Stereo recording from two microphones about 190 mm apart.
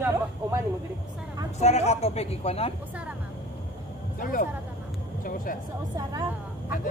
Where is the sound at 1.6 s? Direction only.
35° left (ahead or behind).